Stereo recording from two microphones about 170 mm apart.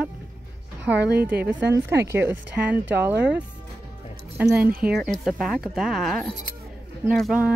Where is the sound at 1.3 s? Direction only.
65° right (ahead or behind).